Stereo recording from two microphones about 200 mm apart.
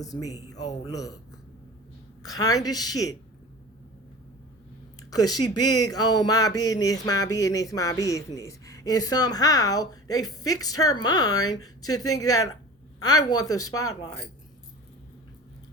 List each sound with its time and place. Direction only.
0.0 s speech: 15° left (ahead or behind)
2.2 s a woman's voice: 20° left (ahead or behind)
5.1 s speech: 20° left (ahead or behind)